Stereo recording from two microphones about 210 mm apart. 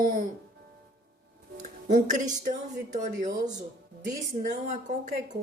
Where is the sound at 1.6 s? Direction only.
35° right (ahead or behind).